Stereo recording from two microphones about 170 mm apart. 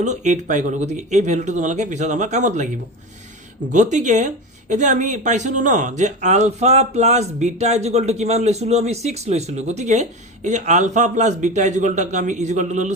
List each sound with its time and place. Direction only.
0.0 s speech: 45° right (ahead or behind)
3.7 s speech: 45° right (ahead or behind)